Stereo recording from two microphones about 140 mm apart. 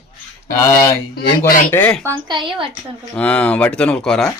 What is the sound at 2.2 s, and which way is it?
Speech, 35° right (ahead or behind).